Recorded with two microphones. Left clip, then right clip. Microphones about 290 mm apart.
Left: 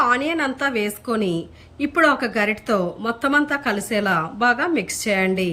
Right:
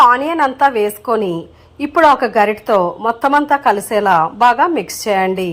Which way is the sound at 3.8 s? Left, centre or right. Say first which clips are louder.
Right 9 dB; right.